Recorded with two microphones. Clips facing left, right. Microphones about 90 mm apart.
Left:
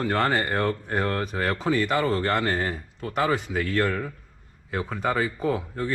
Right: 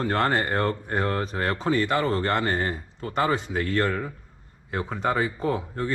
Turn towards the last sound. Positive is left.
turn(degrees=-5)  # may be behind; listen again after turning